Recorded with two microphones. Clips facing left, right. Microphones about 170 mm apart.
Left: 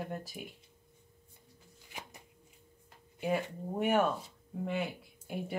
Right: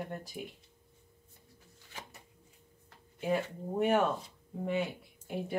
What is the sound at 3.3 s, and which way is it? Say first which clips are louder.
Speech: right 1 dB; 5° left (ahead or behind).